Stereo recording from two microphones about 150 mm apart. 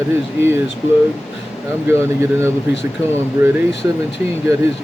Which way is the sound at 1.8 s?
15° right (ahead or behind).